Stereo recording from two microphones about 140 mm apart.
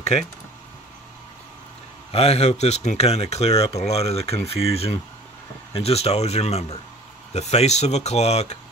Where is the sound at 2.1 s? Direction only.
50° left (ahead or behind).